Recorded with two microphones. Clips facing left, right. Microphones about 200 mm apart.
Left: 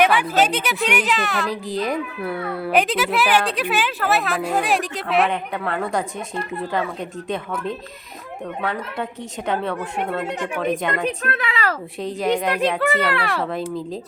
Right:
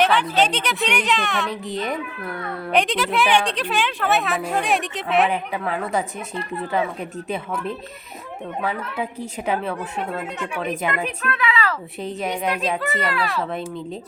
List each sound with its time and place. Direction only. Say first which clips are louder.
0.0 s speech: left 1 dB; 10° left (ahead or behind)
7.3 s speech: left 1 dB; 5° right (ahead or behind)
10.6 s speech: left 2 dB; 5° right (ahead or behind)
11.2 s speech: right 1 dB; 40° left (ahead or behind)
11.9 s speech: left 8 dB; 5° right (ahead or behind)
12.8 s speech: left 3 dB; 65° left (ahead or behind)
13.4 s speech: left 3 dB; centre (ahead or behind)